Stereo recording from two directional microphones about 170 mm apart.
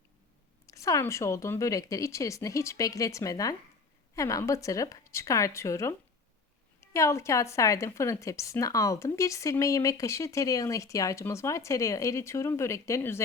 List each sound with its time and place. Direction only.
0.7 s speech: 20° left (ahead or behind)
6.9 s speech: 15° left (ahead or behind)